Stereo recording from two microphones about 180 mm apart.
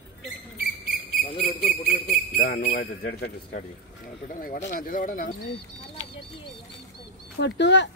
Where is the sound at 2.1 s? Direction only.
55° left (ahead or behind).